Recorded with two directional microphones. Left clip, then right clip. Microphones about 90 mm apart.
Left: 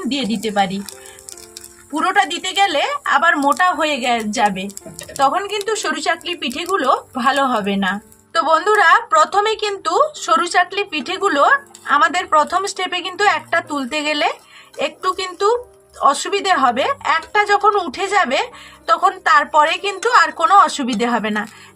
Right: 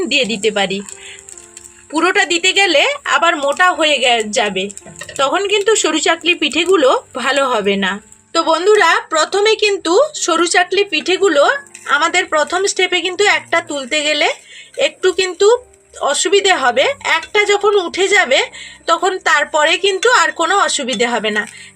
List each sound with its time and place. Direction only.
0.1 s a woman's voice: 50° right (ahead or behind)
2.1 s a woman's voice: 50° right (ahead or behind)
8.3 s speech: 40° right (ahead or behind)